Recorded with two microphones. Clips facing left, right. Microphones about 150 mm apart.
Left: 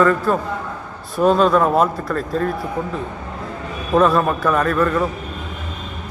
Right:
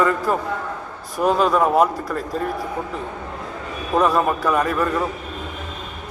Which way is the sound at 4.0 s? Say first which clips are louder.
Left 2 dB; 15° right (ahead or behind).